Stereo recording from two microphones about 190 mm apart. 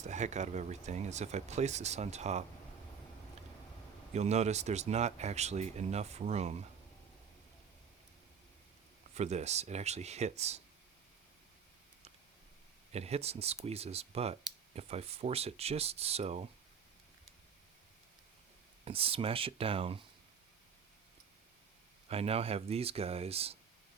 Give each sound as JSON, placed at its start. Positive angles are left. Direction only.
{"t": 0.0, "sound": "speech", "side_deg": -40}
{"t": 4.1, "sound": "speech", "side_deg": -35}
{"t": 9.1, "sound": "speech", "side_deg": -35}
{"t": 12.9, "sound": "speech", "side_deg": -35}
{"t": 18.9, "sound": "speech", "side_deg": -30}
{"t": 22.1, "sound": "speech", "side_deg": -30}